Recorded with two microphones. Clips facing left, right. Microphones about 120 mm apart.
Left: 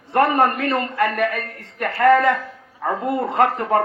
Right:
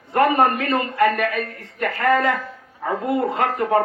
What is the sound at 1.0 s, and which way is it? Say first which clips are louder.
Speech: right 2 dB; 65° right (ahead or behind).